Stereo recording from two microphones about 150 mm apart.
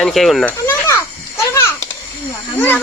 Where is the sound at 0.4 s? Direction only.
15° left (ahead or behind).